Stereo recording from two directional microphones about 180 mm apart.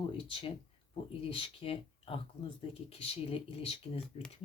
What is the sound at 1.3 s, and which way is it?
Speech, 30° left (ahead or behind).